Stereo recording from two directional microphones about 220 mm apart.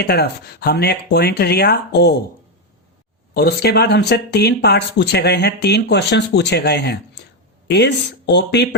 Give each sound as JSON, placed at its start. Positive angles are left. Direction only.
{"t": 0.0, "sound": "speech", "side_deg": 45}
{"t": 3.3, "sound": "speech", "side_deg": 45}